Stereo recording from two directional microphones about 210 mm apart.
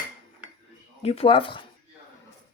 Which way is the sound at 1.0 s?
25° left (ahead or behind).